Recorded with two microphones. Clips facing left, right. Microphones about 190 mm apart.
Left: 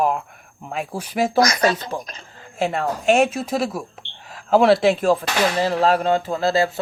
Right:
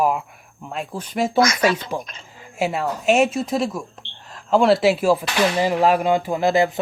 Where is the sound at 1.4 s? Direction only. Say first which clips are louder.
Right 1 dB; 40° left (ahead or behind).